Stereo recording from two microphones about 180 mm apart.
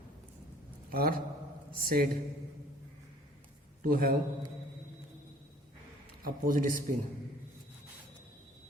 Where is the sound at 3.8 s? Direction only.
50° right (ahead or behind).